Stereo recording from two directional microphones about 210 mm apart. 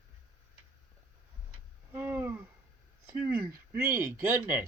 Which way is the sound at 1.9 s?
10° right (ahead or behind).